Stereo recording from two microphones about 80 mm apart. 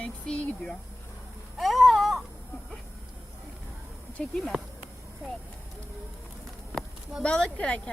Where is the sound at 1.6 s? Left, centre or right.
Centre.